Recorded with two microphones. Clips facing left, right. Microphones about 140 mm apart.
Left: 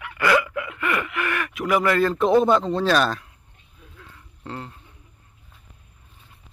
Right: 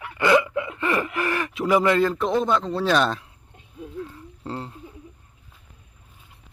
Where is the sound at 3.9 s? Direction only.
30° right (ahead or behind).